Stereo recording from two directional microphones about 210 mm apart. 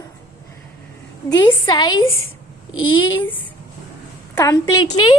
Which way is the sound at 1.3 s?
20° left (ahead or behind).